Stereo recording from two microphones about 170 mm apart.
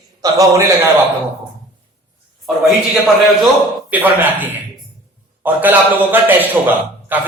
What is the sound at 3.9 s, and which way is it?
A man's voice, 10° right (ahead or behind).